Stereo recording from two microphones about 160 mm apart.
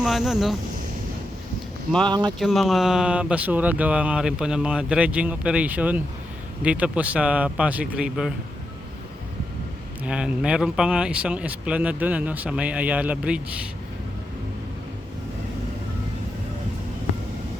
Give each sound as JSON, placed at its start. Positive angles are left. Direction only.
{"t": 0.0, "sound": "speech", "side_deg": 0}
{"t": 2.0, "sound": "speech", "side_deg": -25}
{"t": 2.4, "sound": "speech", "side_deg": 0}
{"t": 10.0, "sound": "speech", "side_deg": -5}